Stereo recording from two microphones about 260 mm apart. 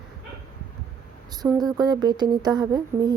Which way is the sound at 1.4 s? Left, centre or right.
Centre.